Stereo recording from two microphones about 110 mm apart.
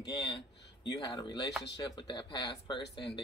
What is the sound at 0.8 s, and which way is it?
Speech, 40° left (ahead or behind).